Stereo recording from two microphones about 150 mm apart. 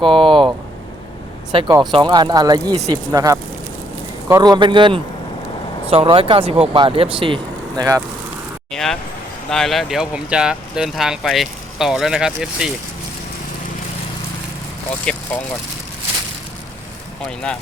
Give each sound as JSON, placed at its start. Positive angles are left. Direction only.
{"t": 0.0, "sound": "speech", "side_deg": -35}
{"t": 1.5, "sound": "speech", "side_deg": -35}
{"t": 8.7, "sound": "a sound", "side_deg": 5}
{"t": 9.5, "sound": "speech", "side_deg": 0}
{"t": 15.1, "sound": "speech", "side_deg": 5}
{"t": 17.2, "sound": "speech", "side_deg": 5}